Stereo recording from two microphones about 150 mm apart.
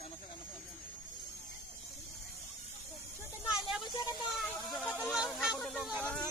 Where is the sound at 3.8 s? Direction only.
30° left (ahead or behind).